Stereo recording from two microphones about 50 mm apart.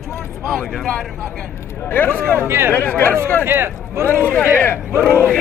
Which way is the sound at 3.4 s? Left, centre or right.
Right.